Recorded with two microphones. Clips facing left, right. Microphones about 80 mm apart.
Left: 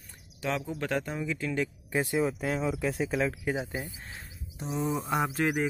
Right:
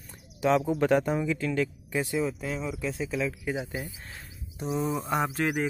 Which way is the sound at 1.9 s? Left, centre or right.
Left.